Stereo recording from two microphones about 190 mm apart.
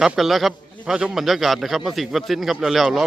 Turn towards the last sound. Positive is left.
turn(degrees=0)  # may be behind; listen again after turning